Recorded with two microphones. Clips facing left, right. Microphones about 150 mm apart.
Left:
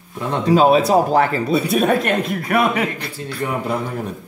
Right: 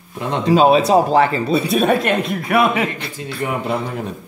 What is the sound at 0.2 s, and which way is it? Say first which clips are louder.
A man's voice: right 1 dB; 20° right (ahead or behind).